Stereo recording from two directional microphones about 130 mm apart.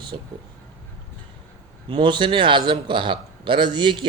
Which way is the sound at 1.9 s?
35° right (ahead or behind).